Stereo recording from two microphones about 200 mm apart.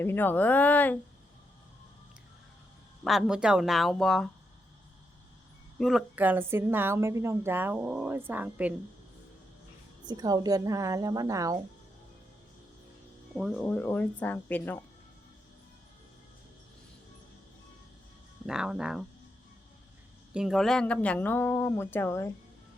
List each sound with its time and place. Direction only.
0.0 s speech: 10° left (ahead or behind)
3.0 s speech: centre (ahead or behind)
5.8 s a woman's voice: centre (ahead or behind)
10.1 s a woman's voice: 20° right (ahead or behind)
13.3 s speech: centre (ahead or behind)
18.4 s speech: 5° right (ahead or behind)
20.3 s speech: centre (ahead or behind)